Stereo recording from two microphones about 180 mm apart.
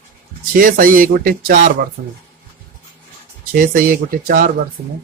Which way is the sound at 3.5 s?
50° right (ahead or behind).